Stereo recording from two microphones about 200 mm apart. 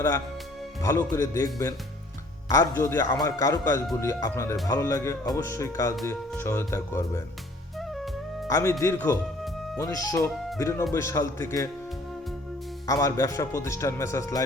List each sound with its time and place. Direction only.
0.8 s speech: 15° left (ahead or behind)
7.8 s music: centre (ahead or behind)
8.4 s speech: 15° left (ahead or behind)
12.9 s speech: 15° left (ahead or behind)